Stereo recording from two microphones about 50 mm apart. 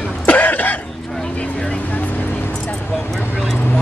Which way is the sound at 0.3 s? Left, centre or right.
Left.